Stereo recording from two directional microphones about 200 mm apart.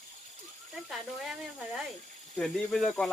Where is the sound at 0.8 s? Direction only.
Centre (ahead or behind).